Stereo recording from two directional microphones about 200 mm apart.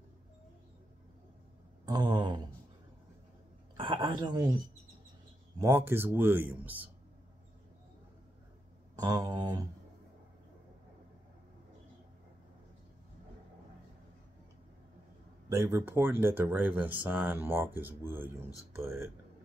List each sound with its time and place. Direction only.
1.9 s a sound: 20° right (ahead or behind)
3.7 s speech: 25° right (ahead or behind)
5.6 s speech: 10° right (ahead or behind)
8.9 s speech: 20° right (ahead or behind)
15.5 s speech: 15° right (ahead or behind)